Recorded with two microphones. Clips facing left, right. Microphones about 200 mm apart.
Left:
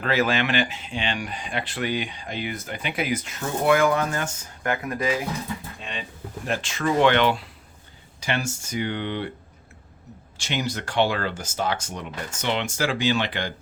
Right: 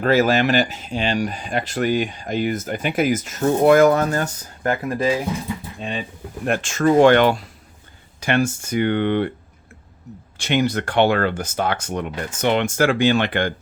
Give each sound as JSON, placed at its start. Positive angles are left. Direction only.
{"t": 0.0, "sound": "speech", "side_deg": -45}
{"t": 6.4, "sound": "speech", "side_deg": -55}
{"t": 10.3, "sound": "speech", "side_deg": -55}